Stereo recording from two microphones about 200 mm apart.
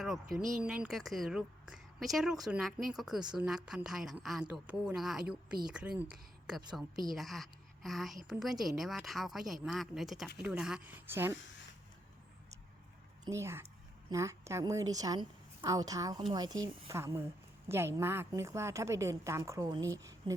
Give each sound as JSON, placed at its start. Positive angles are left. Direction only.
{"t": 0.0, "sound": "a woman's voice", "side_deg": 0}
{"t": 13.2, "sound": "a woman's voice", "side_deg": -15}